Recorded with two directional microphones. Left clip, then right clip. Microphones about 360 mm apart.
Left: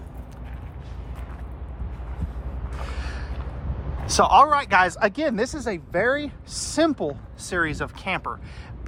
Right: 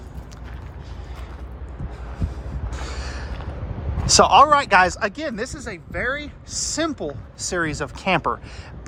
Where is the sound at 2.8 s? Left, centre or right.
Centre.